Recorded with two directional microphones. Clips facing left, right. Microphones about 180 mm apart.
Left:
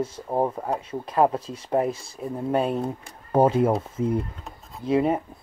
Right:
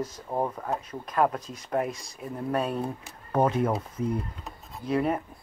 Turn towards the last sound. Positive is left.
turn(degrees=25)  # may be behind; listen again after turning